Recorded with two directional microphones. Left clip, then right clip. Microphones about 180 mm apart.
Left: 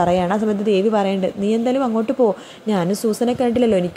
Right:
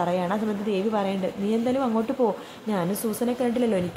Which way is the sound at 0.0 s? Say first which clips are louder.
Left 8 dB; 35° left (ahead or behind).